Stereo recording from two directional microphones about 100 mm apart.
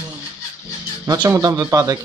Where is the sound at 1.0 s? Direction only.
35° right (ahead or behind).